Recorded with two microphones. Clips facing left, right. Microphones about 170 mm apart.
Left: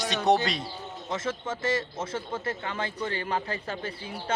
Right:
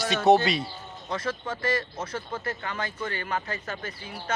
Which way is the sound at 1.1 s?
20° left (ahead or behind).